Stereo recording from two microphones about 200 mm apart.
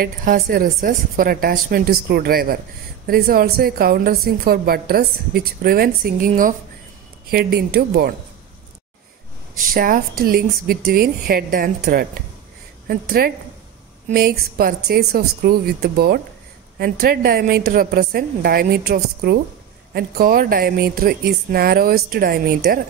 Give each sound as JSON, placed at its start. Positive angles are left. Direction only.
{"t": 0.0, "sound": "a woman's voice", "side_deg": -45}
{"t": 9.8, "sound": "a woman's voice", "side_deg": -45}